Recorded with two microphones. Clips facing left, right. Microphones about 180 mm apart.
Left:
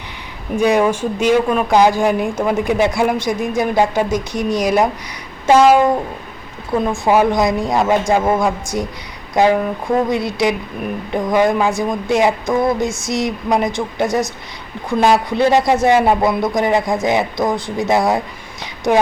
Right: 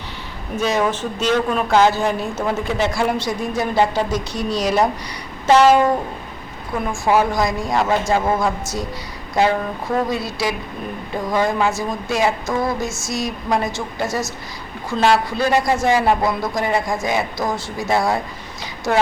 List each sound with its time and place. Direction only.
0.5 s speech: 15° left (ahead or behind)
7.0 s a man's voice: 20° left (ahead or behind)
9.3 s a man's voice: 15° left (ahead or behind)